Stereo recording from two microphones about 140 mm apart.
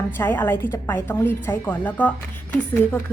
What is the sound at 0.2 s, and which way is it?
A woman's voice, 15° left (ahead or behind).